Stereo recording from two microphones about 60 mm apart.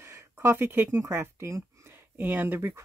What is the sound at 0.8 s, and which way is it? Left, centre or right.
Speech, right.